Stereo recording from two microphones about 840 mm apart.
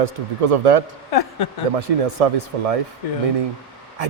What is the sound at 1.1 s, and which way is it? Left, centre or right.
Speech, left.